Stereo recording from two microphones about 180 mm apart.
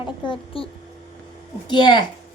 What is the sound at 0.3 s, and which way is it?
A woman's voice, 30° left (ahead or behind).